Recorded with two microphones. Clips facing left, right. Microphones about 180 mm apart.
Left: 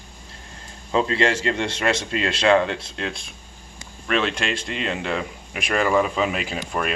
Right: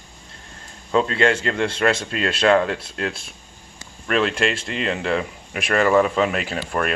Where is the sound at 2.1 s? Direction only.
25° left (ahead or behind).